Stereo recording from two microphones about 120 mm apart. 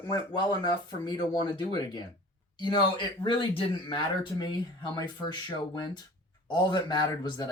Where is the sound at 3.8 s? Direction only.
45° left (ahead or behind).